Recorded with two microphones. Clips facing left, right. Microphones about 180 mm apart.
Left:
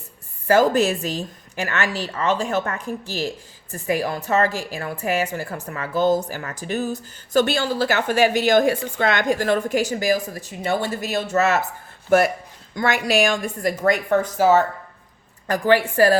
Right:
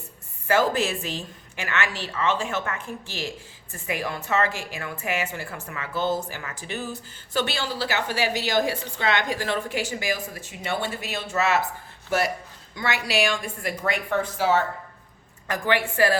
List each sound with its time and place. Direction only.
0.4 s a woman's voice: 40° left (ahead or behind)